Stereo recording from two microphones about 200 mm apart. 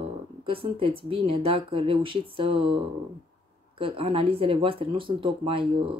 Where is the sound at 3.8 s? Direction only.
30° right (ahead or behind).